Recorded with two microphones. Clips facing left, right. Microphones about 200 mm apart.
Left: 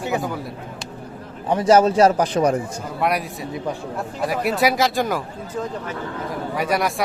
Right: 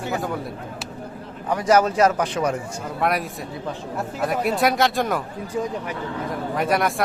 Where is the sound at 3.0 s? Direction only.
Centre (ahead or behind).